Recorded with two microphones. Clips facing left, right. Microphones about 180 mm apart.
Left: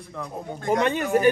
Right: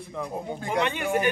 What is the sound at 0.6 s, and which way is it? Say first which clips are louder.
Speech: left 5 dB; 40° left (ahead or behind).